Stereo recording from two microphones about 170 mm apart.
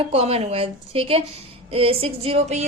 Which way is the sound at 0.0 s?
35° right (ahead or behind).